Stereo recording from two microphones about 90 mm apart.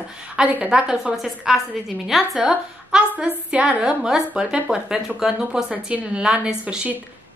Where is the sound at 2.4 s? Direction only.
10° right (ahead or behind).